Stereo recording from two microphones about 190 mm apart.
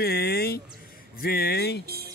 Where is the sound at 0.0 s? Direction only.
55° left (ahead or behind).